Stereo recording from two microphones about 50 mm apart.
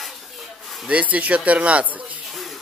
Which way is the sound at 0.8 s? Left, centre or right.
Right.